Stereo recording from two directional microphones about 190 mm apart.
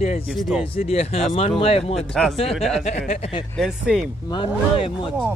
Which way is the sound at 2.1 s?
5° left (ahead or behind).